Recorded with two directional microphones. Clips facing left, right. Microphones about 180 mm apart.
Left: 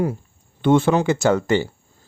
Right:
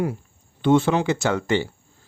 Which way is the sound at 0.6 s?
50° left (ahead or behind).